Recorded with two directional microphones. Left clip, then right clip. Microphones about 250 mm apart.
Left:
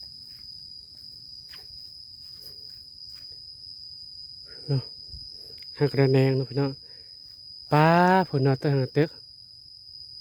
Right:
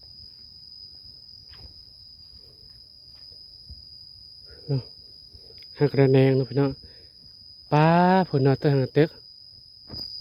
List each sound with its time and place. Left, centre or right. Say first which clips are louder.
4.6 s cricket: even; centre
5.7 s speech: right 3 dB; centre
7.7 s speech: even; centre